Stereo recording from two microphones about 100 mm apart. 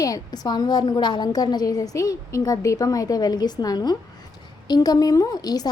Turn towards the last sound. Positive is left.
turn(degrees=40)  # may be behind; listen again after turning